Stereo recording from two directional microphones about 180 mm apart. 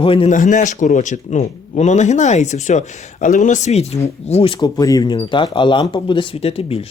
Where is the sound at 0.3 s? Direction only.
45° left (ahead or behind).